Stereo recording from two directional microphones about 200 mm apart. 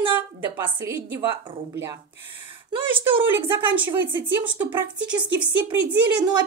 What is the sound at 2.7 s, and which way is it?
Speech, 25° right (ahead or behind).